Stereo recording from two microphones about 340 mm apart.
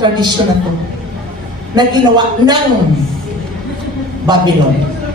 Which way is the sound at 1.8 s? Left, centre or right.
Centre.